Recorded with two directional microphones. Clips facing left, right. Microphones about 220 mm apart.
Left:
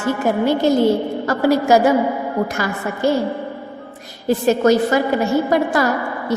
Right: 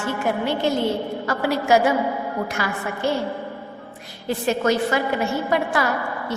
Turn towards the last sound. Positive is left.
turn(degrees=40)  # may be behind; listen again after turning